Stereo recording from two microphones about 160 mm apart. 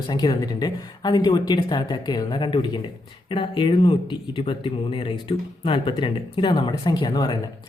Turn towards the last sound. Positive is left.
turn(degrees=25)  # may be behind; listen again after turning